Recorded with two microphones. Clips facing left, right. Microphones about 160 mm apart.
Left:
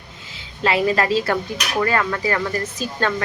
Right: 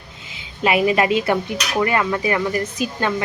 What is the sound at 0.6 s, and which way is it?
Speech, 15° right (ahead or behind).